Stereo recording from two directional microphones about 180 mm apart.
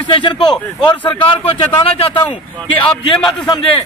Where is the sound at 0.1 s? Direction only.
25° left (ahead or behind).